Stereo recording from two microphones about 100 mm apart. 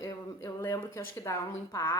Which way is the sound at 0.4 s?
30° left (ahead or behind).